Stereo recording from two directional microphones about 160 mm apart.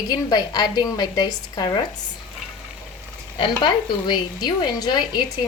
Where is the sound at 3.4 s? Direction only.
30° left (ahead or behind).